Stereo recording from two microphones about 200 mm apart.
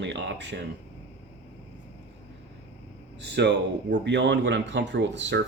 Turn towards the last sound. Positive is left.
turn(degrees=-60)  # may be behind; listen again after turning